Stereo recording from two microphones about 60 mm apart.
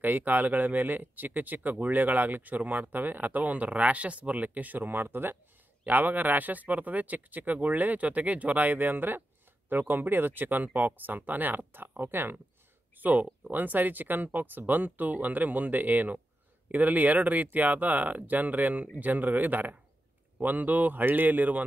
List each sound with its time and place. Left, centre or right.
0.0 s speech: right